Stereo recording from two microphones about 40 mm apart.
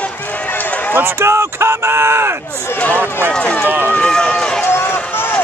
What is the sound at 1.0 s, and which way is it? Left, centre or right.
Speech, right.